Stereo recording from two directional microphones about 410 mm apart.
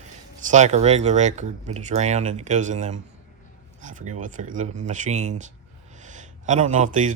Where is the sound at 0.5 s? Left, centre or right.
Centre.